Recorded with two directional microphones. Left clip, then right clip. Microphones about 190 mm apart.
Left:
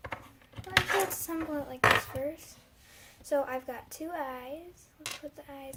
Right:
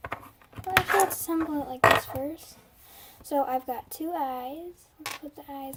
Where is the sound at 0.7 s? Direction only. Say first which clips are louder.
Right 5 dB; 45° right (ahead or behind).